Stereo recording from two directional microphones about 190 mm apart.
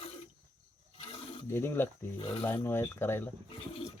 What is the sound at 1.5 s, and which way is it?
Speech, 10° left (ahead or behind).